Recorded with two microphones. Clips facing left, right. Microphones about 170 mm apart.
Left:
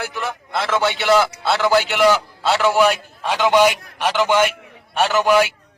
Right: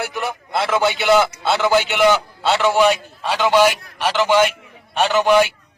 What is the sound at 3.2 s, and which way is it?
A man's voice, 15° left (ahead or behind).